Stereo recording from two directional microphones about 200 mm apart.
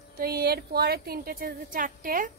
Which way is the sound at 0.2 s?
50° right (ahead or behind).